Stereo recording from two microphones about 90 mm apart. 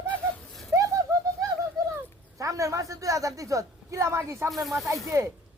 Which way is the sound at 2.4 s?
35° right (ahead or behind).